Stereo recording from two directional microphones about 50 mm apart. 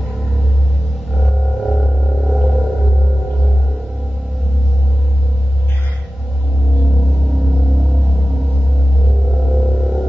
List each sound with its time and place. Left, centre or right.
1.2 s music: centre
9.5 s music: centre